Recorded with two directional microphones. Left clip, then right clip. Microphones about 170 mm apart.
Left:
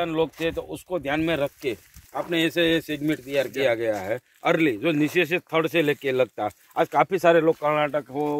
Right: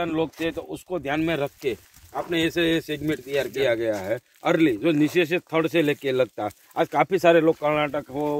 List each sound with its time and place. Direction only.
0.0 s speech: 40° left (ahead or behind)
4.4 s speech: 20° left (ahead or behind)
6.7 s speech: 5° left (ahead or behind)
7.1 s speech: 10° right (ahead or behind)
7.6 s speech: 10° left (ahead or behind)
7.9 s speech: 25° left (ahead or behind)